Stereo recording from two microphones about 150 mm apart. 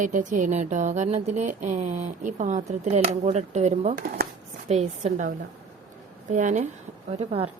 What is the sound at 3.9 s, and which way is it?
Speech, 90° right.